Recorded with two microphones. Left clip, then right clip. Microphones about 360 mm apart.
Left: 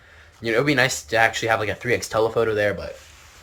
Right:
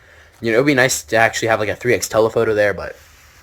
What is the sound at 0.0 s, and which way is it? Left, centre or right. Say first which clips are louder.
Speech: right 5 dB; right.